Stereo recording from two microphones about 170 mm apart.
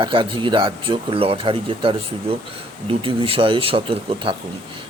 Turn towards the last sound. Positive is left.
turn(degrees=-30)  # may be behind; listen again after turning